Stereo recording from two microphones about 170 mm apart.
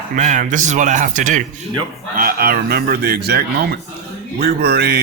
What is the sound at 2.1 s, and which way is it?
A man's voice, 60° right (ahead or behind).